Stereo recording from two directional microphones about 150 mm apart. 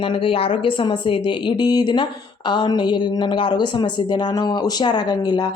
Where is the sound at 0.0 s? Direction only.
35° left (ahead or behind).